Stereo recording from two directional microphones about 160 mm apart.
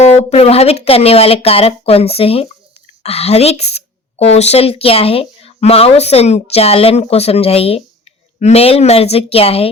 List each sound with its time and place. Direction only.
0.1 s speech: 40° left (ahead or behind)